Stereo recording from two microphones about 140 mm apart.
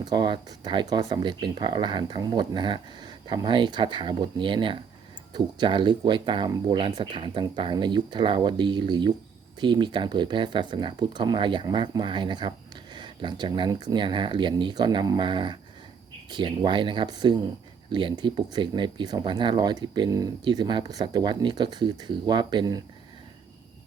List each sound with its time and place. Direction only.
0.0 s speech: 30° right (ahead or behind)